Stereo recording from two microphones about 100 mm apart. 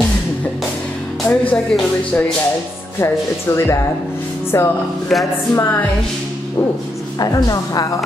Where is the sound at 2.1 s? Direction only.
20° left (ahead or behind).